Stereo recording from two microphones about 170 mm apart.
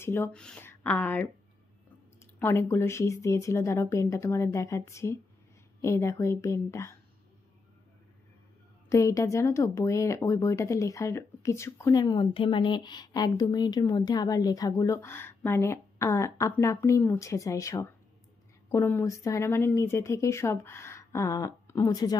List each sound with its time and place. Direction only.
0.0 s a woman's voice: 10° left (ahead or behind)
2.3 s a woman's voice: 15° left (ahead or behind)
8.8 s a woman's voice: 20° left (ahead or behind)